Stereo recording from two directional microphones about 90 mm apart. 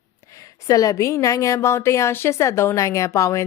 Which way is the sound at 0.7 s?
40° left (ahead or behind).